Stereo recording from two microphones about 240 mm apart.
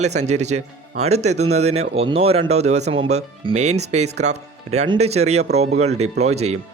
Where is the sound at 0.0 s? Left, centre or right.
Right.